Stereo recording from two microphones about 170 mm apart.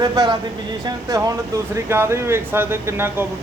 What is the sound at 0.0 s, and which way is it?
Speech, 25° right (ahead or behind).